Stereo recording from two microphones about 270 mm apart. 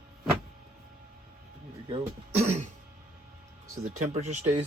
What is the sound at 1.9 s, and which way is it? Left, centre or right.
Throat clearing, right.